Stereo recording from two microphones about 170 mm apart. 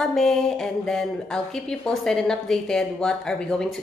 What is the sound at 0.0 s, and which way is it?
A woman's voice, centre (ahead or behind).